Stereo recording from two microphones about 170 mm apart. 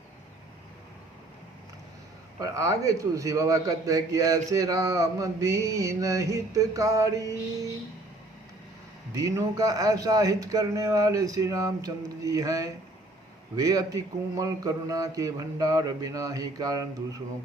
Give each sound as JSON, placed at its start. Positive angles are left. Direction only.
{"t": 2.4, "sound": "a man's voice", "side_deg": -20}
{"t": 9.1, "sound": "a man's voice", "side_deg": -20}